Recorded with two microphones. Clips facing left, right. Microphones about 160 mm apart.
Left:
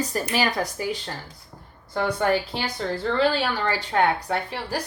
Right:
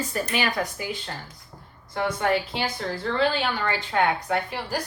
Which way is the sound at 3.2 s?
40° left (ahead or behind).